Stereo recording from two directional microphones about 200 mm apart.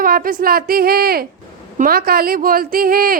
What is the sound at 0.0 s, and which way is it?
A man's voice, 45° right (ahead or behind).